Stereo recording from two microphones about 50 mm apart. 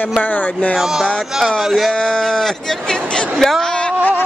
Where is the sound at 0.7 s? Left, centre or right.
Centre.